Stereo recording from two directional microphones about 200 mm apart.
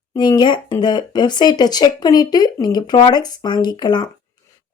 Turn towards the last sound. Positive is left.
turn(degrees=20)  # may be behind; listen again after turning